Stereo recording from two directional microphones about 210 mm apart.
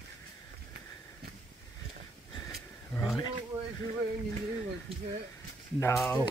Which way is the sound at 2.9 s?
15° left (ahead or behind).